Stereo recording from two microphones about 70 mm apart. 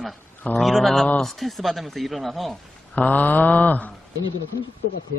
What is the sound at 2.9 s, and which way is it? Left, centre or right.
Mantra, left.